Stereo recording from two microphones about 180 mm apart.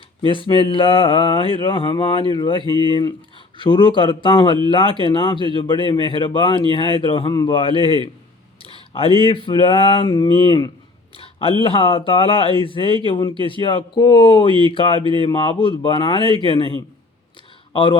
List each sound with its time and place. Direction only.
0.2 s speech: 30° left (ahead or behind)
11.2 s a sound: 30° left (ahead or behind)
11.6 s speech: 30° left (ahead or behind)